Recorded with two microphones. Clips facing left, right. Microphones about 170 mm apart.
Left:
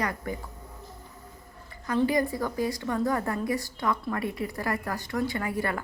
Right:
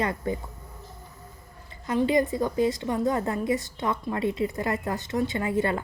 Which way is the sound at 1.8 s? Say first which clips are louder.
Right 2 dB; 20° right (ahead or behind).